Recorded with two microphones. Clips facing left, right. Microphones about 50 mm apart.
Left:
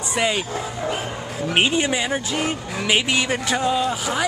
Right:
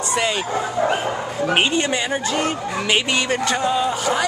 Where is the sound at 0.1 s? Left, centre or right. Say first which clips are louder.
Even; centre.